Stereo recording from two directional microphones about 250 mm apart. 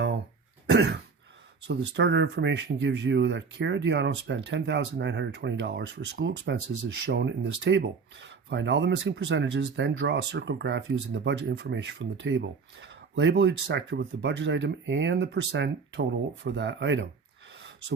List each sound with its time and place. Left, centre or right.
0.7 s throat clearing: right
1.6 s speech: right
17.5 s a sound: right